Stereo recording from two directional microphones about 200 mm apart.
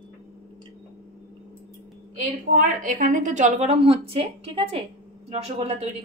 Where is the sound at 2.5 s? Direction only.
40° right (ahead or behind).